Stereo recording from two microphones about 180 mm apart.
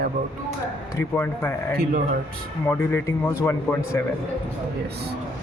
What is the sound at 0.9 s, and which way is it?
Speech, 10° left (ahead or behind).